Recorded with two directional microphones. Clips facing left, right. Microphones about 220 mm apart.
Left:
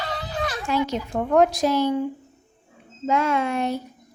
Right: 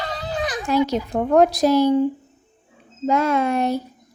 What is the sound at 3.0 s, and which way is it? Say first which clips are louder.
Speech: right 3 dB; 40° right (ahead or behind).